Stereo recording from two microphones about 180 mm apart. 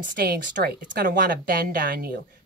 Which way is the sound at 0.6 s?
55° right (ahead or behind).